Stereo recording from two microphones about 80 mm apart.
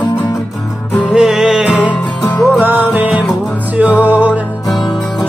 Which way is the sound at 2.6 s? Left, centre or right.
Right.